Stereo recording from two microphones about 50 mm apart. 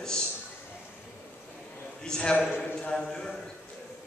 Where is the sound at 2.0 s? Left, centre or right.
Centre.